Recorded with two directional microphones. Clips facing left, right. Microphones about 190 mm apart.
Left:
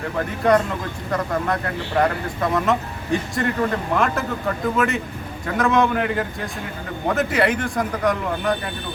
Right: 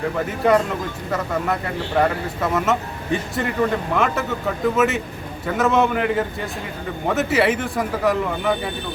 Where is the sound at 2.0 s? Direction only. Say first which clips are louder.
Even; centre (ahead or behind).